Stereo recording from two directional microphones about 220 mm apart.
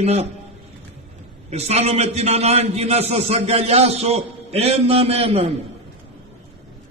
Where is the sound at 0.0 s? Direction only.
30° right (ahead or behind).